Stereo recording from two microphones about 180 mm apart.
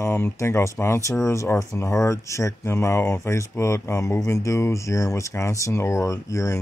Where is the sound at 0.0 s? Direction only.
15° left (ahead or behind).